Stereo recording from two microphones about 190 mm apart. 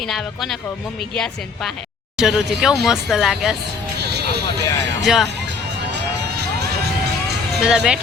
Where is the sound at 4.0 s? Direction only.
60° right (ahead or behind).